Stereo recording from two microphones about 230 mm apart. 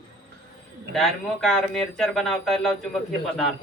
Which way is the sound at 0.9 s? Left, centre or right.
Centre.